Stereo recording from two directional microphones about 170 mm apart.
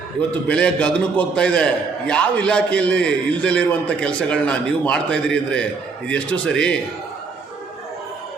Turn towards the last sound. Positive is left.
turn(degrees=5)  # may be behind; listen again after turning